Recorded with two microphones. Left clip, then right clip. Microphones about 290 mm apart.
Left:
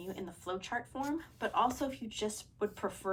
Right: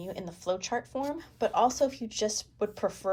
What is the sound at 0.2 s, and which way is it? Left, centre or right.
Speech, centre.